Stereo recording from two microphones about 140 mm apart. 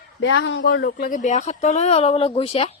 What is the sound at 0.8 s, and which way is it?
Speech, 80° left.